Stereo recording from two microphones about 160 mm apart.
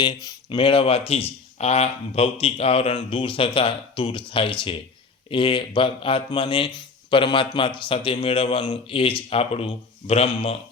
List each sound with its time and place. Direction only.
0.0 s speech: 25° left (ahead or behind)